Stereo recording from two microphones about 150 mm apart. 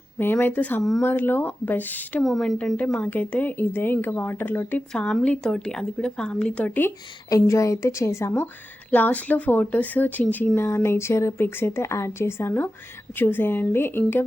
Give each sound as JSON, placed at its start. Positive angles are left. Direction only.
{"t": 0.2, "sound": "a woman's voice", "side_deg": 15}
{"t": 0.8, "sound": "speech", "side_deg": 0}
{"t": 1.0, "sound": "a woman's voice", "side_deg": 15}
{"t": 2.2, "sound": "a woman's voice", "side_deg": 0}